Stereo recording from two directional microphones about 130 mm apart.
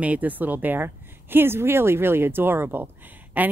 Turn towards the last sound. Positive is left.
turn(degrees=-15)  # may be behind; listen again after turning